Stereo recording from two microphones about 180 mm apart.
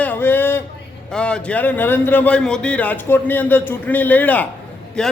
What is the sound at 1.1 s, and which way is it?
A man's voice, 5° left (ahead or behind).